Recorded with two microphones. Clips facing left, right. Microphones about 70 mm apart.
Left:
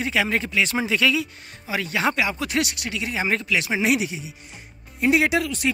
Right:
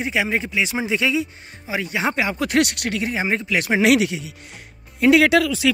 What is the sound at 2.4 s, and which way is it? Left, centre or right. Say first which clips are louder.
Speech: right 6 dB; right.